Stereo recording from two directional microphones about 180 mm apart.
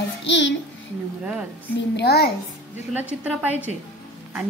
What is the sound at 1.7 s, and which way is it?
Speech, 65° left (ahead or behind).